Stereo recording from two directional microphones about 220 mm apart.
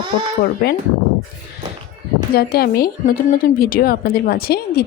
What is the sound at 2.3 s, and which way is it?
Speech, 45° left (ahead or behind).